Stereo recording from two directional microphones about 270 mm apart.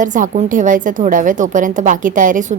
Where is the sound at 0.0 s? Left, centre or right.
Right.